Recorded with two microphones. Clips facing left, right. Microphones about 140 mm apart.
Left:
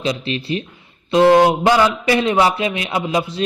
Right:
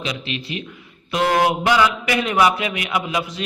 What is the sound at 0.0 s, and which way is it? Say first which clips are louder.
A man's voice: left 6 dB; 35° left (ahead or behind).